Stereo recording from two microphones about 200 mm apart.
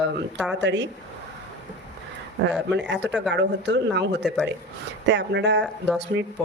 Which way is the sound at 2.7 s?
60° right (ahead or behind).